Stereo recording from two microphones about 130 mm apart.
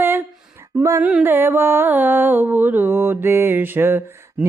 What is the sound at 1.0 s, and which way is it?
Music, 10° right (ahead or behind).